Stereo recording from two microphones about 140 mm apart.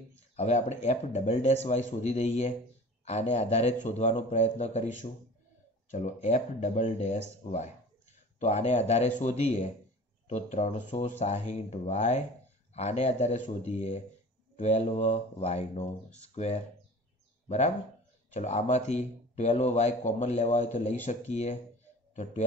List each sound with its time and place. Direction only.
0.4 s a man's voice: 50° left (ahead or behind)
5.9 s a man's voice: 55° left (ahead or behind)